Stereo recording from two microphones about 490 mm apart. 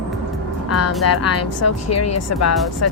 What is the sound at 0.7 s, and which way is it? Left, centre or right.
A woman's voice, left.